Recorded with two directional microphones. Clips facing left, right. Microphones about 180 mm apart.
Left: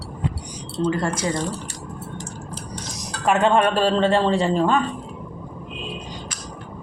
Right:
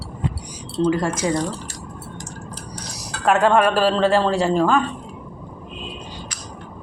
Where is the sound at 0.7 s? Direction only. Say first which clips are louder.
Right 3 dB; 10° right (ahead or behind).